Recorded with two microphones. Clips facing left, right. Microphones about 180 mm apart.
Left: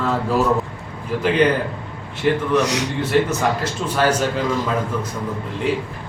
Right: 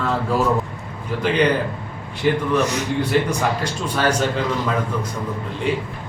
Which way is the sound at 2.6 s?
75° left (ahead or behind).